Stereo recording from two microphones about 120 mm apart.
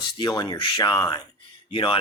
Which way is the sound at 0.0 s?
40° left (ahead or behind).